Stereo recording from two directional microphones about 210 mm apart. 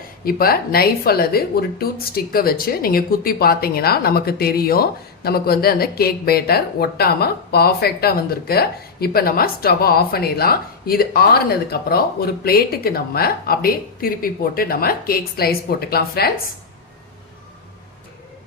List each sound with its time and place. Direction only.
0.3 s speech: 45° left (ahead or behind)